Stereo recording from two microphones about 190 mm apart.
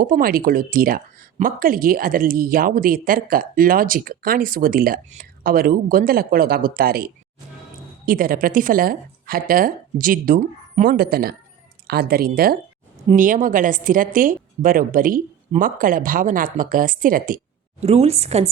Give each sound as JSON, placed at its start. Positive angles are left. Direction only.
{"t": 0.0, "sound": "speech", "side_deg": -50}
{"t": 17.8, "sound": "a woman's voice", "side_deg": -35}